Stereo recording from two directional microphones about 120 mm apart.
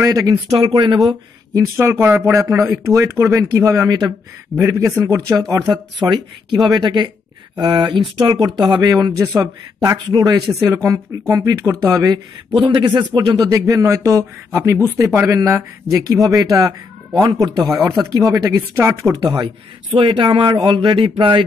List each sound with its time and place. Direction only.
0.0 s speech: 30° right (ahead or behind)
0.6 s speech: 45° right (ahead or behind)
0.9 s speech: 30° right (ahead or behind)
6.0 s speech: 40° right (ahead or behind)
10.6 s speech: 25° right (ahead or behind)
17.6 s speech: 15° right (ahead or behind)
18.1 s speech: 30° right (ahead or behind)
18.8 s speech: 20° right (ahead or behind)
19.1 s speech: 35° right (ahead or behind)